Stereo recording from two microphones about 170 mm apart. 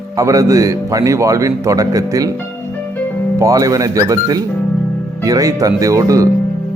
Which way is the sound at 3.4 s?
20° right (ahead or behind).